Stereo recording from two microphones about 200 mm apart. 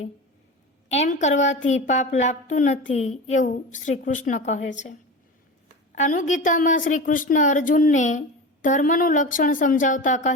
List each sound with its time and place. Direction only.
0.9 s a woman's voice: 35° left (ahead or behind)
5.9 s a woman's voice: 40° left (ahead or behind)